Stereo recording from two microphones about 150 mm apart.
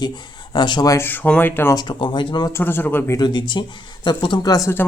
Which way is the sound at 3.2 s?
30° left (ahead or behind).